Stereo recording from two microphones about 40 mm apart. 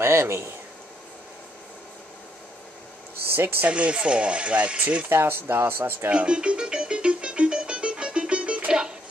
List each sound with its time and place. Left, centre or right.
0.0 s speech: right
3.6 s speech: right
5.1 s speech: right
6.1 s music: right